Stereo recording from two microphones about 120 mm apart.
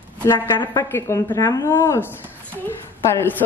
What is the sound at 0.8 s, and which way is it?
A woman's voice, 25° left (ahead or behind).